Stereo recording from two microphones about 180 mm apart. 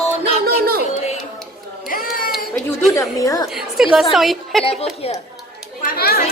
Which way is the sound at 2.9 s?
20° left (ahead or behind).